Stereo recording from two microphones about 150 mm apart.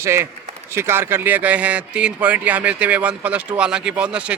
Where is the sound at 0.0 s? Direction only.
15° right (ahead or behind).